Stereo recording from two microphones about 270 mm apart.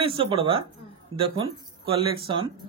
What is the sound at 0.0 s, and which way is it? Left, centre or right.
Speech, centre.